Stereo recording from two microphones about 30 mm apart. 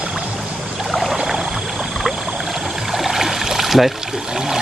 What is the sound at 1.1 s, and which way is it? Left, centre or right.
Boat, centre.